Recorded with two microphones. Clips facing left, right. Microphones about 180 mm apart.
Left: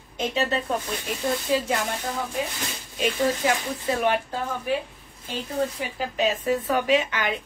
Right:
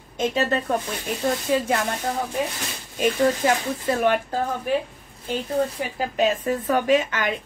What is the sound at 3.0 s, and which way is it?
Speech, 45° right (ahead or behind).